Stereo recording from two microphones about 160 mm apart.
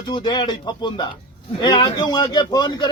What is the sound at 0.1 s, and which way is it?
A man's voice, 30° left (ahead or behind).